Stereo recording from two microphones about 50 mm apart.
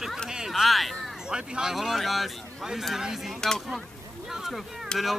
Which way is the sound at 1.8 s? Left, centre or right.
Centre.